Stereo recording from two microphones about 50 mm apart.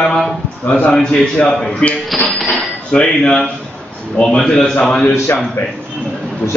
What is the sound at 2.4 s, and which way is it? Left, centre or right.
Cutlery, left.